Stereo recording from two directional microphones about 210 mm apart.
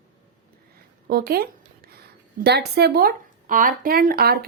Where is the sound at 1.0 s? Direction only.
45° right (ahead or behind).